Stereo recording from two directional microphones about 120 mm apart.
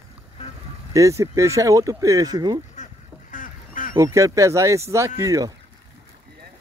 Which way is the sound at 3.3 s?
90° left.